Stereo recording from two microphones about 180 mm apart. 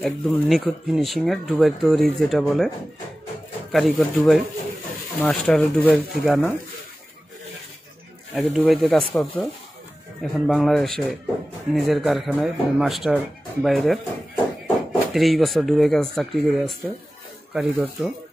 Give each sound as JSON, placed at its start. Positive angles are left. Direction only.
{"t": 0.0, "sound": "speech", "side_deg": 0}
{"t": 3.7, "sound": "speech", "side_deg": 0}
{"t": 6.2, "sound": "speech", "side_deg": -5}
{"t": 8.4, "sound": "speech", "side_deg": 0}